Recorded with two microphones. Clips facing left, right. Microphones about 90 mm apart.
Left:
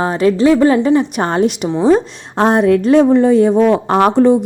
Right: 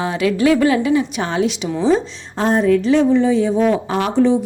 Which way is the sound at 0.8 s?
45° left (ahead or behind).